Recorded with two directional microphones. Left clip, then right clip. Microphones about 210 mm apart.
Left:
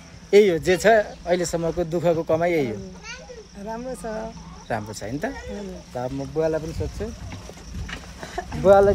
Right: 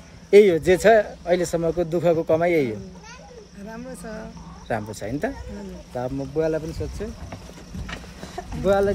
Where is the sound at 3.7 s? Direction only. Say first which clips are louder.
Left 6 dB; 10° left (ahead or behind).